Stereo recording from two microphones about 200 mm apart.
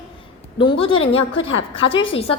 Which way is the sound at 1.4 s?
75° left (ahead or behind).